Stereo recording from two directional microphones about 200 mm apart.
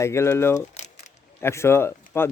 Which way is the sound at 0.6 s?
35° left (ahead or behind).